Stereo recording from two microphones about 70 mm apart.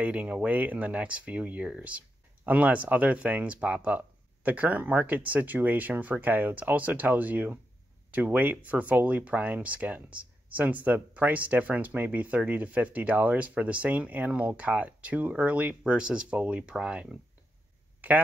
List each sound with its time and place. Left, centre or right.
0.0 s speech: right